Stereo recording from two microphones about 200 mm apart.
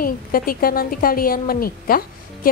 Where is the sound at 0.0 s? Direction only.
45° left (ahead or behind).